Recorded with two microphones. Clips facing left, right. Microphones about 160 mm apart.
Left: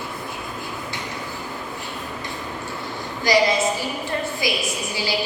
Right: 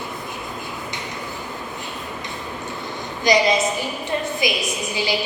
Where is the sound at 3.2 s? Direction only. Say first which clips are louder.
Right 1 dB; 20° right (ahead or behind).